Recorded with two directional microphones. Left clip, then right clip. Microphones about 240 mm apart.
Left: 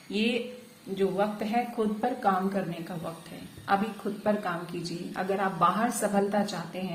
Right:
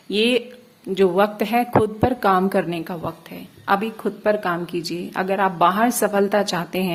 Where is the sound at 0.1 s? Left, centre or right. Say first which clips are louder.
Right 10 dB; right.